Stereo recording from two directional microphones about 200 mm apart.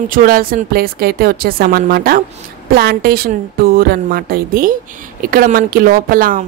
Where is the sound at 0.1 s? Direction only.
45° right (ahead or behind).